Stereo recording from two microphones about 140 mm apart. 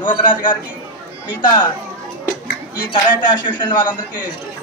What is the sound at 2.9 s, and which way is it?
Speech, 30° left (ahead or behind).